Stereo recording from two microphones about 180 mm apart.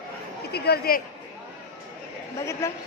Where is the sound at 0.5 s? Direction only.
60° left (ahead or behind).